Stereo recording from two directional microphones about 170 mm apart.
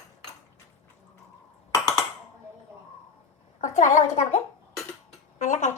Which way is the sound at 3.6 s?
45° left (ahead or behind).